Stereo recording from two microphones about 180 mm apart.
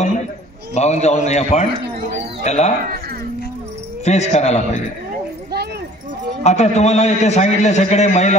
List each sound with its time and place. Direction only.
0.7 s a man's voice: 40° left (ahead or behind)
4.0 s a man's voice: 40° left (ahead or behind)
6.4 s a man's voice: 40° left (ahead or behind)